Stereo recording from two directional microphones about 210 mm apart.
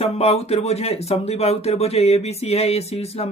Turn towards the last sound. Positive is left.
turn(degrees=30)  # may be behind; listen again after turning